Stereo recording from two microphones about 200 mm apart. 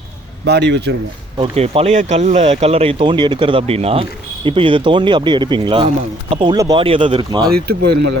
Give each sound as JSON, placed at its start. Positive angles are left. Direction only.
{"t": 0.4, "sound": "speech", "side_deg": -55}
{"t": 1.4, "sound": "speech", "side_deg": -30}